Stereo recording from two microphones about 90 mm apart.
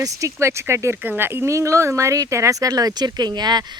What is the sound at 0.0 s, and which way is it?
Speech, 40° right (ahead or behind).